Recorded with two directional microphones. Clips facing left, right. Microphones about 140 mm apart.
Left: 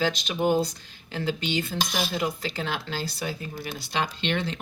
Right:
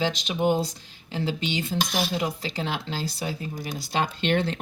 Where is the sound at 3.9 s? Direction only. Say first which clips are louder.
Right 3 dB; 45° right (ahead or behind).